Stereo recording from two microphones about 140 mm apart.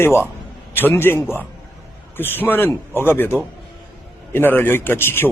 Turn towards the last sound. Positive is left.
turn(degrees=15)  # may be behind; listen again after turning